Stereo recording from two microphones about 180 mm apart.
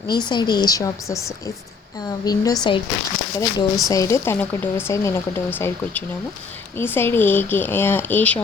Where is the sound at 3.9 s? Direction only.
15° left (ahead or behind).